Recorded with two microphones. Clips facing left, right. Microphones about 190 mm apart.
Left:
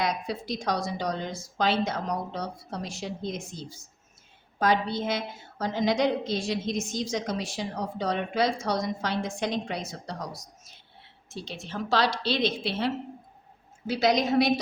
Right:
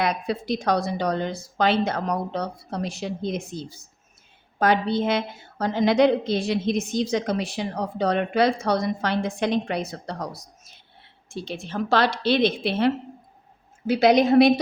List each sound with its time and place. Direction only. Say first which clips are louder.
0.0 s a woman's voice: right 4 dB; 60° right (ahead or behind)